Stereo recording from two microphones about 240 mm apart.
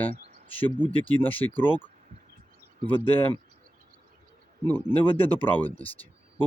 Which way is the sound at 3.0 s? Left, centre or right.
Centre.